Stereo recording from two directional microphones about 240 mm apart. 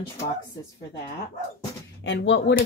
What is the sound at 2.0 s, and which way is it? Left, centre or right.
Speech, left.